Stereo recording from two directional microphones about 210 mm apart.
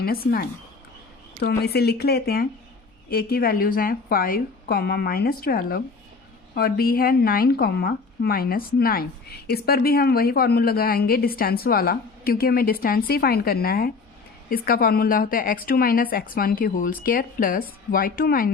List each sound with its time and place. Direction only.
0.0 s speech: 45° left (ahead or behind)